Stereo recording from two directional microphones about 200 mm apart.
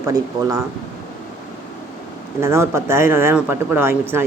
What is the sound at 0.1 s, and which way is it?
Speech, 15° right (ahead or behind).